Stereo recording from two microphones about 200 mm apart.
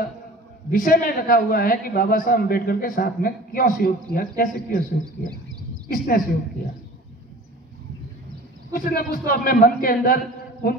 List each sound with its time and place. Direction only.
0.7 s a man's voice: 45° left (ahead or behind)
5.9 s a man's voice: 45° left (ahead or behind)
8.7 s a man's voice: 45° left (ahead or behind)